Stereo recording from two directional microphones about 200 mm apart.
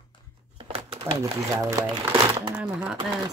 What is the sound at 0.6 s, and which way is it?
Crumpling, 30° right (ahead or behind).